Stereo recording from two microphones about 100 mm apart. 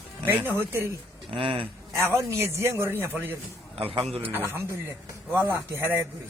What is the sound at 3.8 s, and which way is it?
Speech, 70° right (ahead or behind).